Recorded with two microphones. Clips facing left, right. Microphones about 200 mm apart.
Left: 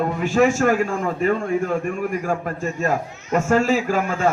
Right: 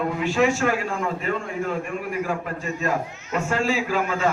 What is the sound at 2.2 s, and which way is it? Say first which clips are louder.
A man's voice: left 4 dB; 45° left (ahead or behind).